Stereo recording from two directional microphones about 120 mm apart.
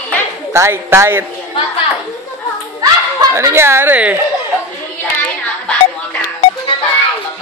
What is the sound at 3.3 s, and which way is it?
Speech, 20° right (ahead or behind).